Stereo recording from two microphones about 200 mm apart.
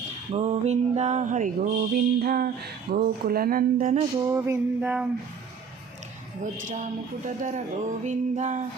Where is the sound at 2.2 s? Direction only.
45° right (ahead or behind).